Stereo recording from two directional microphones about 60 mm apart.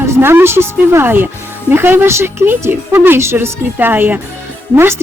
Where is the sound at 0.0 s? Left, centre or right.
Right.